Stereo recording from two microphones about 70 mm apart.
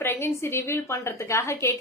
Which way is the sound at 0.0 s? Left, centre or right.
Left.